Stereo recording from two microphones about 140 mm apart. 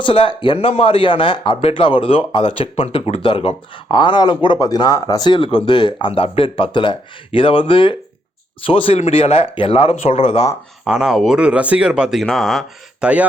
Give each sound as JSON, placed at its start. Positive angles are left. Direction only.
{"t": 0.0, "sound": "speech", "side_deg": 40}
{"t": 10.8, "sound": "speech", "side_deg": -5}